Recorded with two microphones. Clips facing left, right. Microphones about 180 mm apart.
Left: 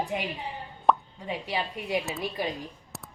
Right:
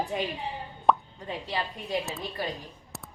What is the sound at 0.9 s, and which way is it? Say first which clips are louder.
Plop: even; centre (ahead or behind).